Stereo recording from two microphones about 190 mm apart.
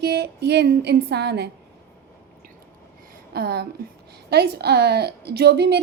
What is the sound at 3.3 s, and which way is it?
A woman's voice, 55° right (ahead or behind).